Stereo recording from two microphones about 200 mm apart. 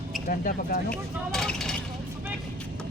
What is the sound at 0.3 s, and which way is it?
Speech, 45° left (ahead or behind).